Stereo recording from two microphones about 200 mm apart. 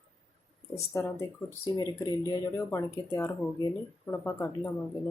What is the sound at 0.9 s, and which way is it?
Speech, 15° left (ahead or behind).